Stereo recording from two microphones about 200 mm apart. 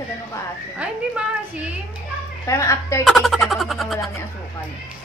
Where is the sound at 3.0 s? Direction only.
Centre (ahead or behind).